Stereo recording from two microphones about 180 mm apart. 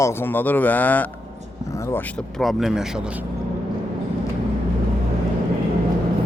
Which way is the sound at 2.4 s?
Centre (ahead or behind).